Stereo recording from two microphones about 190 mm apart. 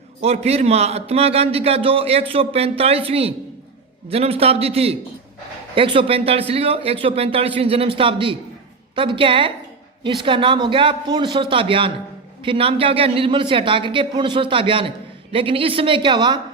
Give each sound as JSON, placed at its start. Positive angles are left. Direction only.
{"t": 0.2, "sound": "a man's voice", "side_deg": -35}